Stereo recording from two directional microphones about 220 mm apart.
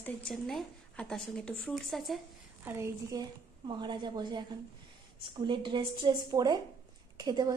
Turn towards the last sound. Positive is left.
turn(degrees=-20)  # may be behind; listen again after turning